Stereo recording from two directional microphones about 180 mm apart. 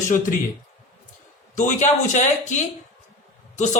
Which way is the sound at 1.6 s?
40° left (ahead or behind).